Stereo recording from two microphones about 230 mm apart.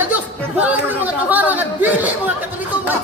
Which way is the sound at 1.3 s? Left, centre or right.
Centre.